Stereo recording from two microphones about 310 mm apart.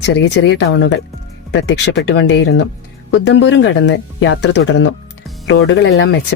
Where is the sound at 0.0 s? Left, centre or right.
Left.